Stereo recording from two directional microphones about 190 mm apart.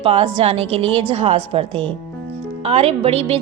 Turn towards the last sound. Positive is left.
turn(degrees=-30)  # may be behind; listen again after turning